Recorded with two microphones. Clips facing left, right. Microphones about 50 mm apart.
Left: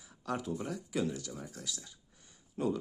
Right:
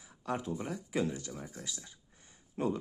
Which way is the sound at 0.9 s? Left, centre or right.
Right.